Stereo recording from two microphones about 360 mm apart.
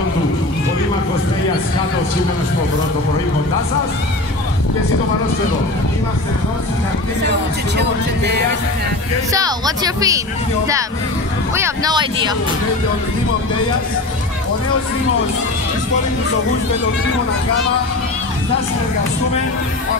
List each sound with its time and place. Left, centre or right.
7.2 s speech: right
9.3 s speech: centre
11.5 s speech: centre